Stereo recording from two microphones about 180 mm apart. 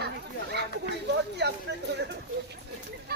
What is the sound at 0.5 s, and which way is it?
Speech, 70° right (ahead or behind).